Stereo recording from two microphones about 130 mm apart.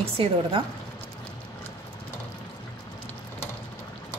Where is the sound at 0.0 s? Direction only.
45° right (ahead or behind).